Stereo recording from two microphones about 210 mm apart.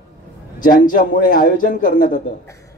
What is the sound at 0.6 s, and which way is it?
A man's voice, 40° left (ahead or behind).